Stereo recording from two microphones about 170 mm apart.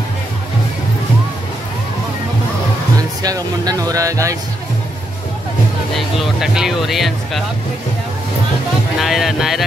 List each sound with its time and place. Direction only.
3.0 s speech: 20° right (ahead or behind)
5.9 s speech: centre (ahead or behind)
9.0 s speech: centre (ahead or behind)